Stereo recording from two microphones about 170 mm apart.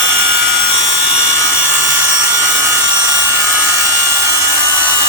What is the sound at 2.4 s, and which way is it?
Helicopter, 15° right (ahead or behind).